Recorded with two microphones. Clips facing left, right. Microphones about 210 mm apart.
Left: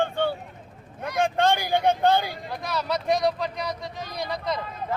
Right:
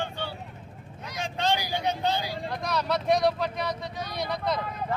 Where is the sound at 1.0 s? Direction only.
55° left (ahead or behind).